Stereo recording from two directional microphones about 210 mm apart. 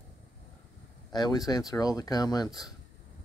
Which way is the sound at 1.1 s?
20° left (ahead or behind).